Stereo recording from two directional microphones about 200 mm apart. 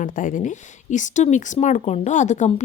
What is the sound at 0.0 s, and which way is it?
Speech, 40° left (ahead or behind).